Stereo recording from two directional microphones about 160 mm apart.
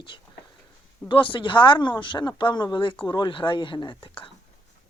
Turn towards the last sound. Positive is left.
turn(degrees=30)  # may be behind; listen again after turning